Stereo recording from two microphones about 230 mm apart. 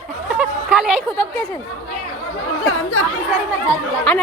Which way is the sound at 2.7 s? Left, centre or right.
Left.